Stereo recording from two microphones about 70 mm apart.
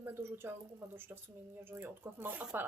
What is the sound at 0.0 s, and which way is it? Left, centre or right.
A woman's voice, right.